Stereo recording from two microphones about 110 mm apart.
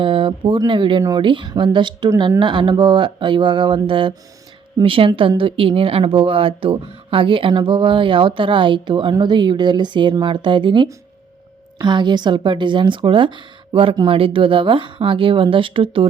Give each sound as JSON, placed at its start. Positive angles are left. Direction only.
{"t": 0.0, "sound": "speech", "side_deg": -50}